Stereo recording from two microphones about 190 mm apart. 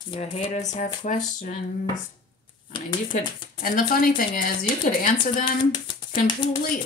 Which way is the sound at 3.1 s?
45° left (ahead or behind).